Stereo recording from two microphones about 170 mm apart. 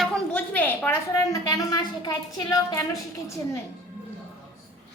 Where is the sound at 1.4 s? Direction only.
20° left (ahead or behind).